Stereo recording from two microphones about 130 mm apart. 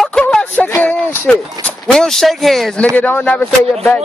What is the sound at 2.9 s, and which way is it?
Speech, 10° left (ahead or behind).